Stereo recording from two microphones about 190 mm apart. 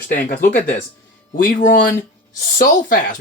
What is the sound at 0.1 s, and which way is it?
Speech, 45° left (ahead or behind).